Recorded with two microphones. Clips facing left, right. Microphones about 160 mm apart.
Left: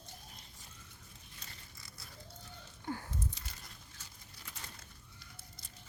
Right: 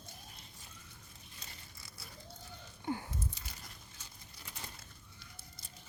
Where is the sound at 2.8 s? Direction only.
15° right (ahead or behind).